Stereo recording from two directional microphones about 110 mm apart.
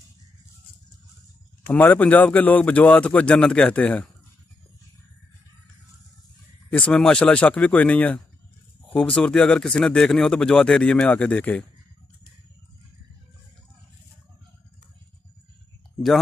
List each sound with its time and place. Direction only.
1.7 s speech: 15° left (ahead or behind)
6.7 s speech: 10° left (ahead or behind)